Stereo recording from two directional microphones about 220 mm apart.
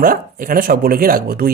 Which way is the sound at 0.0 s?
40° right (ahead or behind).